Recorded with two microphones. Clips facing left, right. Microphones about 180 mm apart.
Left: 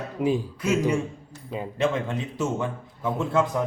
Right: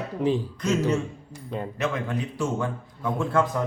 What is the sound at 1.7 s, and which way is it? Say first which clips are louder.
A man's voice: left 4 dB; 25° left (ahead or behind).